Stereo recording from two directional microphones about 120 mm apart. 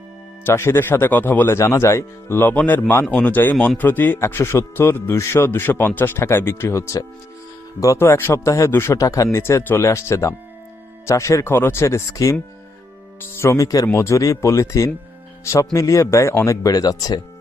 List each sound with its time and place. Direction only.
0.4 s speech: 20° left (ahead or behind)